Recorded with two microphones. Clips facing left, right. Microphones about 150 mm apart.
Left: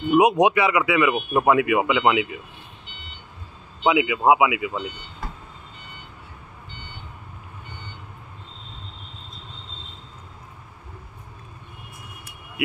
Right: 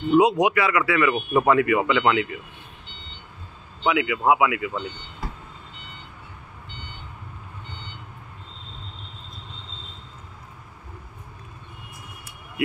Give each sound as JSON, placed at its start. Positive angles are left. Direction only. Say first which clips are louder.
{"t": 0.1, "sound": "speech", "louder": "left 1 dB", "side_deg": 20}
{"t": 3.8, "sound": "speech", "louder": "left 3 dB", "side_deg": 20}